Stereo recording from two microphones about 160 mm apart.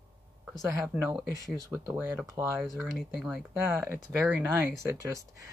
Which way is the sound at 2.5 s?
Centre (ahead or behind).